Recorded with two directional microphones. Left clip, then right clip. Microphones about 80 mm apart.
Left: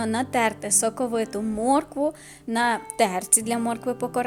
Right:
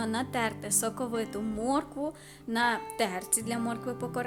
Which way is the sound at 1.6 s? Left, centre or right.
Left.